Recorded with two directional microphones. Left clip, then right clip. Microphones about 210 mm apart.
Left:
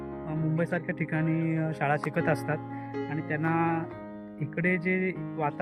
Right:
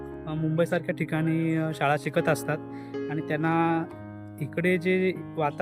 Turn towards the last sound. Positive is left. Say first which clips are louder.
# right 3 dB
turn(degrees=-15)  # may be behind; listen again after turning